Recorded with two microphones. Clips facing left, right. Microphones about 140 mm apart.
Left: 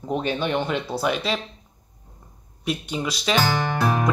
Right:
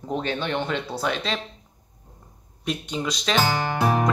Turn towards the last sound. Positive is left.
turn(degrees=-20)  # may be behind; listen again after turning